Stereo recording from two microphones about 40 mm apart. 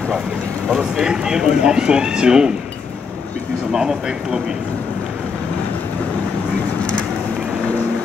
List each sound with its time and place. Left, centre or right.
0.7 s speech: centre
3.7 s speech: centre